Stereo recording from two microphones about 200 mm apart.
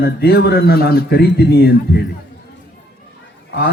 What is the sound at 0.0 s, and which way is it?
A man's voice, 50° left (ahead or behind).